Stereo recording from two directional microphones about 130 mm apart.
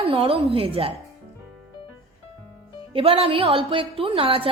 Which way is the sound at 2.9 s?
50° right (ahead or behind).